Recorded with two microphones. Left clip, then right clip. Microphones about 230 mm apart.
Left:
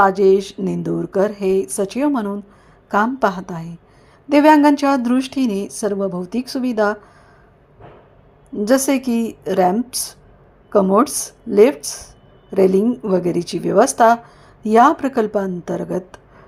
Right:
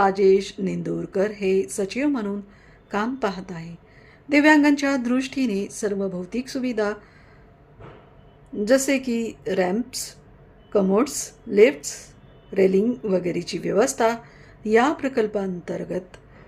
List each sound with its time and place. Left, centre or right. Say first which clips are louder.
0.0 s speech: left 5 dB; centre
8.5 s speech: left 3 dB; centre